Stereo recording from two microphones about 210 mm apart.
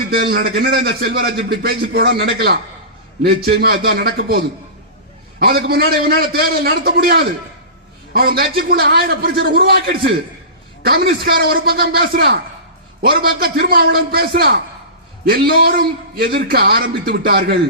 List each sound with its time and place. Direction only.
0.3 s a man's voice: 50° right (ahead or behind)
5.4 s a man's voice: 50° right (ahead or behind)